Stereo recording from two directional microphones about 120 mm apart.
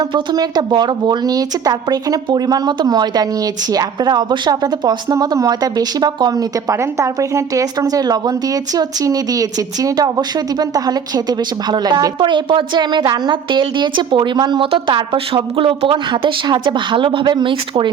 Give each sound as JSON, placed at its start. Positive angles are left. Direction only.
{"t": 0.1, "sound": "a woman's voice", "side_deg": -40}